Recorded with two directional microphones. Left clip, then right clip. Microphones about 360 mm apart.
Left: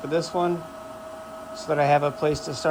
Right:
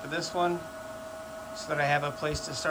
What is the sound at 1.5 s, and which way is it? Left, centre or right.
A man's voice, centre.